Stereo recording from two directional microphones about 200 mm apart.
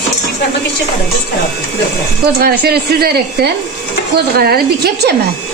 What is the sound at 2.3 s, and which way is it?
Speech, 50° right (ahead or behind).